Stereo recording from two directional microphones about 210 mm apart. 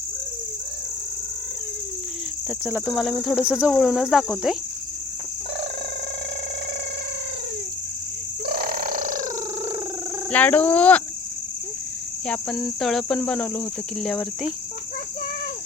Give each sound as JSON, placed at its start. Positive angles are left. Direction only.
{"t": 2.6, "sound": "cricket", "side_deg": -5}
{"t": 8.4, "sound": "a sound", "side_deg": -45}
{"t": 10.3, "sound": "speech", "side_deg": 5}
{"t": 12.2, "sound": "cricket", "side_deg": 5}